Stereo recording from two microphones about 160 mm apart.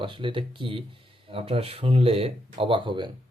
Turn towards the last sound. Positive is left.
turn(degrees=-30)  # may be behind; listen again after turning